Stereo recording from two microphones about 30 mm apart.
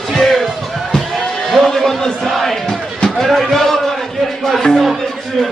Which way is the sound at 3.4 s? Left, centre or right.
Centre.